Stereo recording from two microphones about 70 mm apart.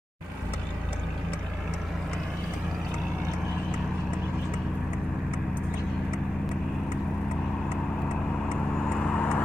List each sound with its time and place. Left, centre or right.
8.8 s vehicle: left